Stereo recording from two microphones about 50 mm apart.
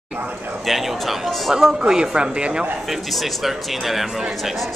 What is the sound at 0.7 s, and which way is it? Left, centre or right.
Speech, centre.